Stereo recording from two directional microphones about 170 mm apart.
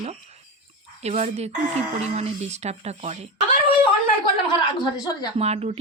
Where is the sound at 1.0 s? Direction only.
40° right (ahead or behind).